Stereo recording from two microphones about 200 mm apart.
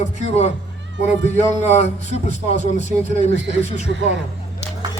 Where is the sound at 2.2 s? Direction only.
40° right (ahead or behind).